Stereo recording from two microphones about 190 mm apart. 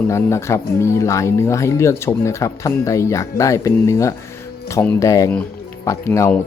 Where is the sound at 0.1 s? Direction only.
15° left (ahead or behind).